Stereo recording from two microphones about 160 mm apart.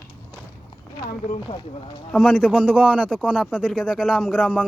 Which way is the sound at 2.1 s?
5° right (ahead or behind).